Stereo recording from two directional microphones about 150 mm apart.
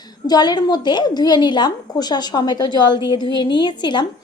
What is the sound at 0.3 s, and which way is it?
A woman's voice, 30° left (ahead or behind).